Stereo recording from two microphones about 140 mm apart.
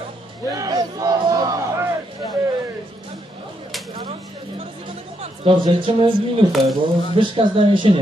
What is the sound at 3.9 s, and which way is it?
Chatter, 40° right (ahead or behind).